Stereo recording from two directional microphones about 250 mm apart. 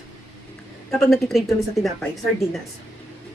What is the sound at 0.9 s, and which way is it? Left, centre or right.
Speech, centre.